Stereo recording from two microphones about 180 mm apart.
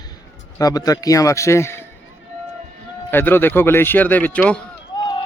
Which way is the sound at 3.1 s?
10° left (ahead or behind).